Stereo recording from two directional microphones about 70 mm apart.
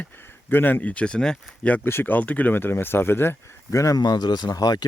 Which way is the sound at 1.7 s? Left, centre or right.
Left.